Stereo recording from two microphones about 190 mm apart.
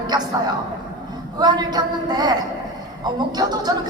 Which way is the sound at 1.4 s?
20° right (ahead or behind).